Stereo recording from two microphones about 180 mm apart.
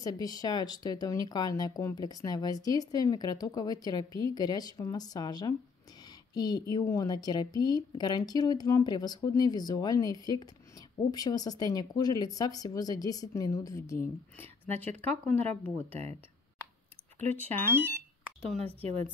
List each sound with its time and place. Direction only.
0.0 s speech: 20° left (ahead or behind)
15.0 s speech: 10° left (ahead or behind)
17.3 s speech: 10° left (ahead or behind)